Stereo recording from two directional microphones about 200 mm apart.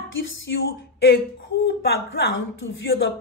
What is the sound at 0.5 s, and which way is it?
Speech, 60° left (ahead or behind).